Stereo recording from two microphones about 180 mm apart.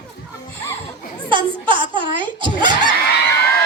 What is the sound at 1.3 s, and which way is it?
Speech, 30° right (ahead or behind).